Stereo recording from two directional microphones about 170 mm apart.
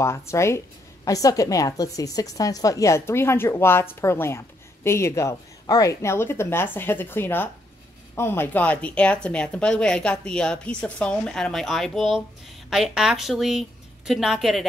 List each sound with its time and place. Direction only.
0.0 s a woman's voice: 15° left (ahead or behind); by 14.7 s centre (ahead or behind)